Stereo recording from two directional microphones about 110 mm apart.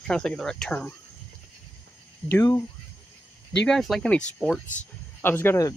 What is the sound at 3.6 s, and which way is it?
Speech, 5° left (ahead or behind).